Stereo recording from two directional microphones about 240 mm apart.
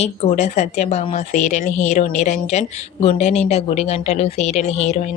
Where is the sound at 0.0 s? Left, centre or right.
Left.